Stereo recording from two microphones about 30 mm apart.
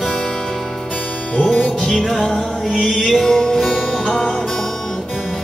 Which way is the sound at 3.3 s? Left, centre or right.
Left.